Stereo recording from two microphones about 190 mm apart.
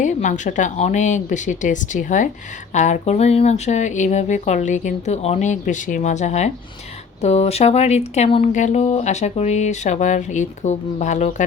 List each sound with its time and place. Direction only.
0.0 s speech: 40° left (ahead or behind)